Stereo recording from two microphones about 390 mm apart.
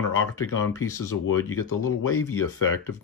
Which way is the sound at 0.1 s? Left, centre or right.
Left.